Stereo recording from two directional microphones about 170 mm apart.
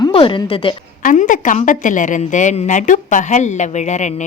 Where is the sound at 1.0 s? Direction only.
50° left (ahead or behind).